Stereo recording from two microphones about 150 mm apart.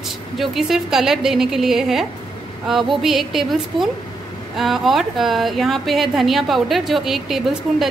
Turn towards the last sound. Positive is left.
turn(degrees=0)  # may be behind; listen again after turning